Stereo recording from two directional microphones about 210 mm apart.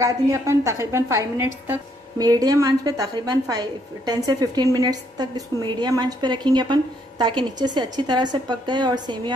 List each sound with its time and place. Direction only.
0.0 s a woman's voice: 15° right (ahead or behind)